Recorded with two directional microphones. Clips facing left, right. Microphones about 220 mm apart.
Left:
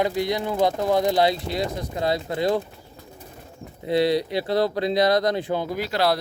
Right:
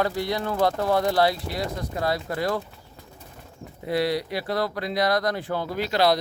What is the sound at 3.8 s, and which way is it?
Speech, 25° left (ahead or behind).